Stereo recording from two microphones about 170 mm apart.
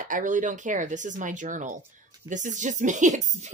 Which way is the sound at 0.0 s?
50° right (ahead or behind).